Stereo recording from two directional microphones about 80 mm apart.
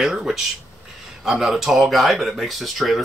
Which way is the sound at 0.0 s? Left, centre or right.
Centre.